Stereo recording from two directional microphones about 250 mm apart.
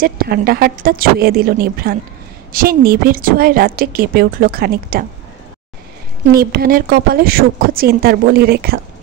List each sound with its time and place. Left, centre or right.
0.0 s a woman's voice: right
6.3 s a woman's voice: right